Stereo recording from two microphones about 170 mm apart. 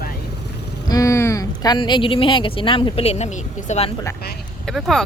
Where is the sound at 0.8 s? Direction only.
20° left (ahead or behind); by 3.9 s 40° left (ahead or behind).